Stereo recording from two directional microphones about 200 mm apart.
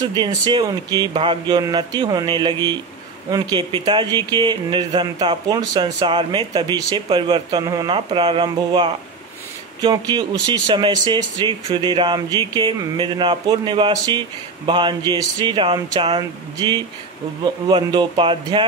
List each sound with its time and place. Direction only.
0.0 s speech: 20° right (ahead or behind)